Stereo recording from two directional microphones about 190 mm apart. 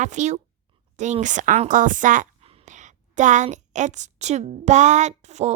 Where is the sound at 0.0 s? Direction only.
40° right (ahead or behind).